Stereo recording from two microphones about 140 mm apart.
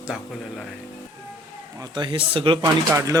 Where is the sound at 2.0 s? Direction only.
40° right (ahead or behind).